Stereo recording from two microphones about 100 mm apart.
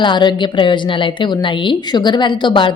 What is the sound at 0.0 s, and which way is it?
A woman's voice, 50° left (ahead or behind).